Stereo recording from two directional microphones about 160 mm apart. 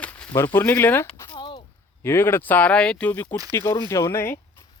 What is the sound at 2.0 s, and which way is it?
Speech, 15° left (ahead or behind).